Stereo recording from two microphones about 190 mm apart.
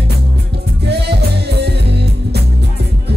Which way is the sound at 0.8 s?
60° right (ahead or behind).